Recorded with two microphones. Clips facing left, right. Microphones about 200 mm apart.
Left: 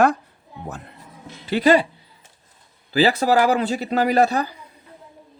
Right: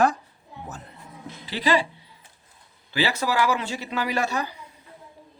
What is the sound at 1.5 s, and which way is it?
Speech, 50° left (ahead or behind).